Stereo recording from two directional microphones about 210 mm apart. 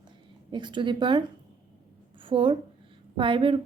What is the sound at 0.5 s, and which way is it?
Speech, 20° right (ahead or behind).